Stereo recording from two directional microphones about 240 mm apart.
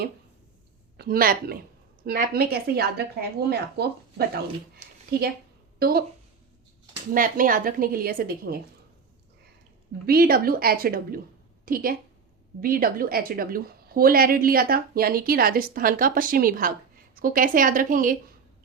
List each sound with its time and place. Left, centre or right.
0.9 s a woman's voice: right
4.8 s a sound: right
5.8 s a woman's voice: right
7.1 s a woman's voice: right
10.1 s a woman's voice: right